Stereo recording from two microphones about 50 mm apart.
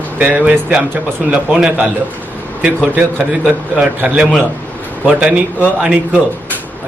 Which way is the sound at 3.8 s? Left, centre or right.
Right.